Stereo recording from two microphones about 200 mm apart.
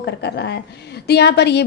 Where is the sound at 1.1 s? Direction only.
55° left (ahead or behind).